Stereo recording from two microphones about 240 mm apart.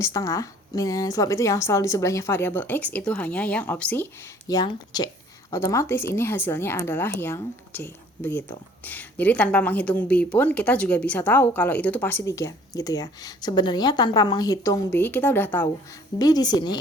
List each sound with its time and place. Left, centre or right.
0.0 s a woman's voice: centre